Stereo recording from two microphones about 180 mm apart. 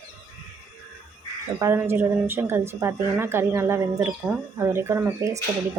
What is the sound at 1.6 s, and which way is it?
Speech, 15° right (ahead or behind).